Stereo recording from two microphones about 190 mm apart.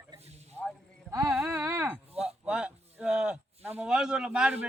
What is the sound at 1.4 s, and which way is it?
A woman's voice, 15° right (ahead or behind).